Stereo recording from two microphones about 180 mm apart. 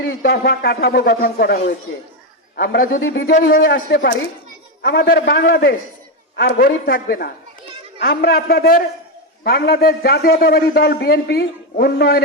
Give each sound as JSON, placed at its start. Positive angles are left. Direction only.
{"t": 0.0, "sound": "a man's voice", "side_deg": 70}
{"t": 2.6, "sound": "a man's voice", "side_deg": 55}
{"t": 3.0, "sound": "a man's voice", "side_deg": 80}